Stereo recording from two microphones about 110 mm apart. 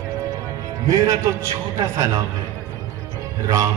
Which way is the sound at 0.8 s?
30° right (ahead or behind).